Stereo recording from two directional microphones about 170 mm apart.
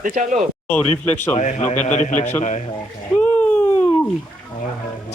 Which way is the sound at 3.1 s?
10° left (ahead or behind).